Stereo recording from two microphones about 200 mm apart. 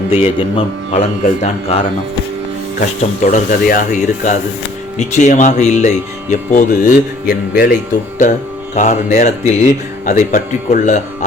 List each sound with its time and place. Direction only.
0.1 s speech: 30° left (ahead or behind)
3.0 s speech: 40° left (ahead or behind)
8.2 s speech: 35° left (ahead or behind)